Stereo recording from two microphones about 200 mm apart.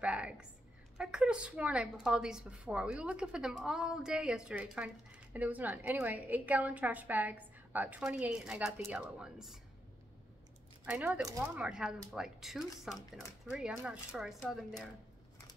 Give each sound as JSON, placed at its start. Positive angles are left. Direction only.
{"t": 0.0, "sound": "a woman's voice", "side_deg": -5}
{"t": 10.9, "sound": "a woman's voice", "side_deg": -5}